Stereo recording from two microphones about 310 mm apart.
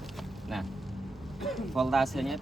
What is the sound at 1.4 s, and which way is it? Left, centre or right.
Speech, centre.